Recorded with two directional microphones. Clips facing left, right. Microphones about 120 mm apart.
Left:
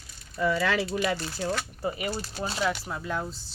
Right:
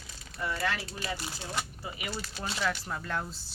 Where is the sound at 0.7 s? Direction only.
75° left (ahead or behind).